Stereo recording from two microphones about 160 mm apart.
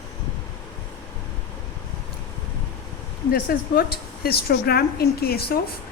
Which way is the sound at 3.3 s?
75° left (ahead or behind).